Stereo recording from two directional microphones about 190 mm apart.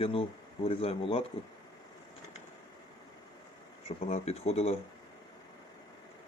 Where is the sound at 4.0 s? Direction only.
35° left (ahead or behind).